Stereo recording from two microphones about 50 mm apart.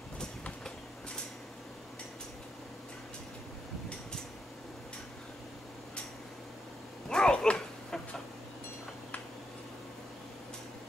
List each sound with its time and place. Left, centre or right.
7.1 s dog: centre